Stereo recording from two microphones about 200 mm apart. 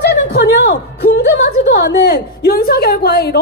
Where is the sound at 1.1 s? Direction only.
55° left (ahead or behind).